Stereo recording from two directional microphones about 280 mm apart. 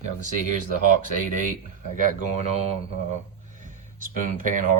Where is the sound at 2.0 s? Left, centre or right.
Right.